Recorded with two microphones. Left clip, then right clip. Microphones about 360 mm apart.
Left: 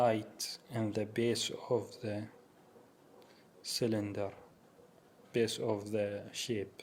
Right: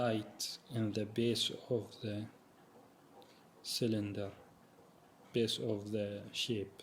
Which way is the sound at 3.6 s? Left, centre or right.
Centre.